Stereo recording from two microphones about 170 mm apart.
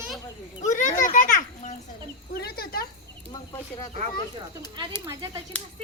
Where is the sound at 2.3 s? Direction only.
65° left (ahead or behind).